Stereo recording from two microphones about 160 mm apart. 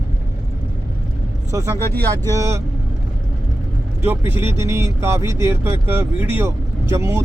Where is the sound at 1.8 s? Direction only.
15° left (ahead or behind).